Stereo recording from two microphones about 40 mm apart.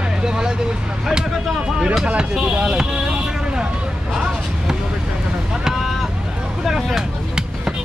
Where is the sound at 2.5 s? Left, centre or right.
Centre.